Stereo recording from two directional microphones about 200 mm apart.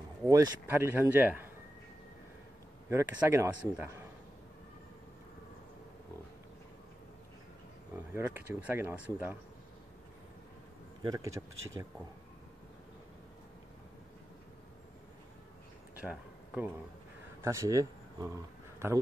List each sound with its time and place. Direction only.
0.3 s speech: 15° right (ahead or behind)
2.9 s speech: 15° right (ahead or behind)
8.1 s speech: 10° right (ahead or behind)
11.0 s speech: 15° right (ahead or behind)
16.1 s a sound: 5° right (ahead or behind)
17.4 s speech: 15° right (ahead or behind)